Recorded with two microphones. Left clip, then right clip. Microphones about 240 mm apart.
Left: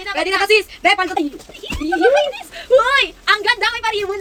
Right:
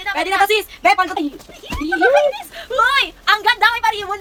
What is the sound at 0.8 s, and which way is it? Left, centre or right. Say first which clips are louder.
Speech: right 1 dB; centre.